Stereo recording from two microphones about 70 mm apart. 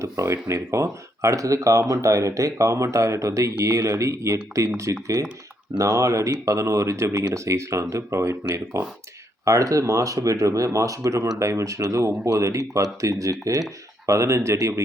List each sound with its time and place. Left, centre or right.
0.0 s speech: right
7.1 s speech: right
7.3 s speech: right
9.4 s speech: right